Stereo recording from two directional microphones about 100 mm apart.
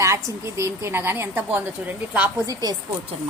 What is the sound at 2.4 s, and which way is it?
Speech, 35° right (ahead or behind).